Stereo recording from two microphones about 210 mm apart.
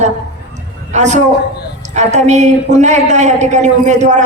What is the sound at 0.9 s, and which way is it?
A woman's voice, 35° right (ahead or behind).